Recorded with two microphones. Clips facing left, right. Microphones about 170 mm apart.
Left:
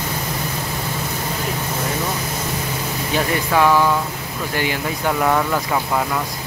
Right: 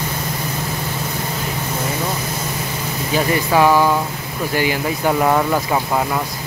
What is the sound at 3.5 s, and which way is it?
Speech, 15° right (ahead or behind).